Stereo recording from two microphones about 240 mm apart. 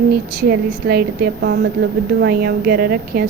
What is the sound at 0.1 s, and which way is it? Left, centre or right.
A woman's voice, right.